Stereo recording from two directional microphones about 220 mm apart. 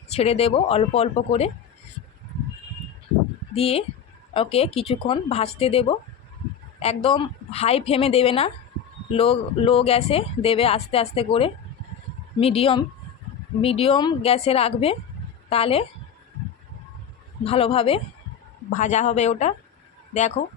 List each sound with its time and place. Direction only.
0.1 s speech: 30° left (ahead or behind)
3.5 s speech: 25° left (ahead or behind)
17.4 s speech: 25° left (ahead or behind)